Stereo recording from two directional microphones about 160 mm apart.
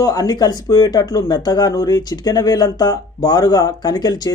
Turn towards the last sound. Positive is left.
turn(degrees=25)  # may be behind; listen again after turning